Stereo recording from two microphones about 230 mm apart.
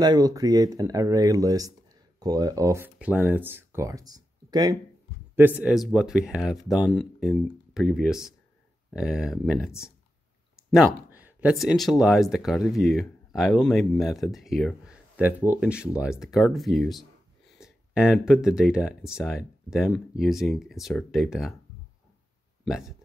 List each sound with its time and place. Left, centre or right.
0.0 s speech: centre
11.1 s speech: centre
22.7 s speech: centre